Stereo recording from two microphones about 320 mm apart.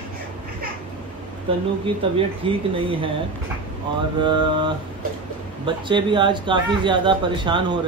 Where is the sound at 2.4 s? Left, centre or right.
Centre.